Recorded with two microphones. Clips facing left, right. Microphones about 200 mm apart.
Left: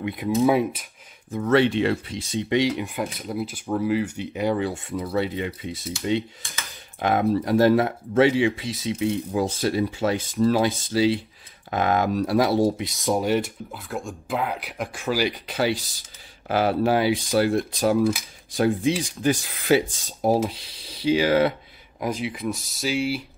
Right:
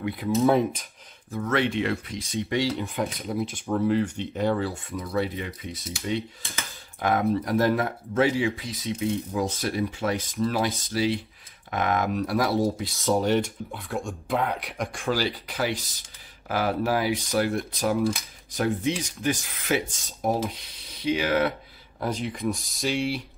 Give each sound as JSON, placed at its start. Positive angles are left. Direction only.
{"t": 0.0, "sound": "speech", "side_deg": 20}
{"t": 0.3, "sound": "speech", "side_deg": 5}
{"t": 1.4, "sound": "speech", "side_deg": 30}
{"t": 2.7, "sound": "speech", "side_deg": 10}
{"t": 4.6, "sound": "speech", "side_deg": 30}
{"t": 12.7, "sound": "speech", "side_deg": 15}
{"t": 15.4, "sound": "speech", "side_deg": 30}
{"t": 22.0, "sound": "speech", "side_deg": 5}